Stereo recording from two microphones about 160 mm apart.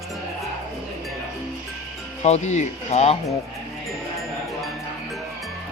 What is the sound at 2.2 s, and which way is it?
Speech, 45° left (ahead or behind).